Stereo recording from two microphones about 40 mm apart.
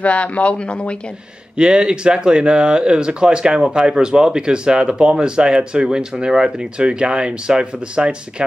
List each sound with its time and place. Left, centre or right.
0.0 s speech: left
1.6 s speech: right